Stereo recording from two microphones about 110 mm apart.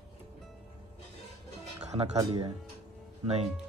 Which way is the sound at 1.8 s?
90° right.